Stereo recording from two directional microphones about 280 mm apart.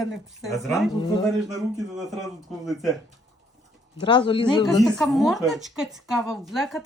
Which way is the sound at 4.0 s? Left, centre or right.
Centre.